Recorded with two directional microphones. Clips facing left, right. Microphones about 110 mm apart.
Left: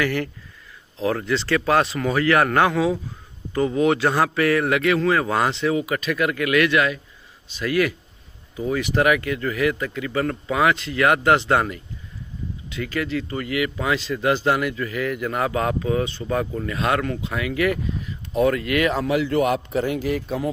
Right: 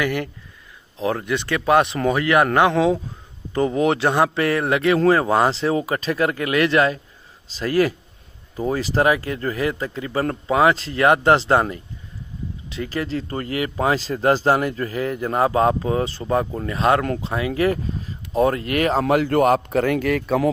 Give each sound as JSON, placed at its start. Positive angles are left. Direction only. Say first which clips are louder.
{"t": 0.0, "sound": "a man's voice", "louder": "even", "side_deg": -20}